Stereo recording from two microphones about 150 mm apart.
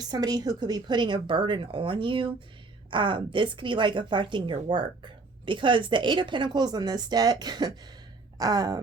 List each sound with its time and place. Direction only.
0.1 s a woman's voice: 25° right (ahead or behind)